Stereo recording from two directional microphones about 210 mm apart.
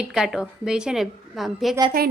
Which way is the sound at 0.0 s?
Centre (ahead or behind).